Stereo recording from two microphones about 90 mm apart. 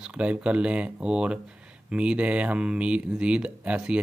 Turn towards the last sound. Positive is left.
turn(degrees=-10)  # may be behind; listen again after turning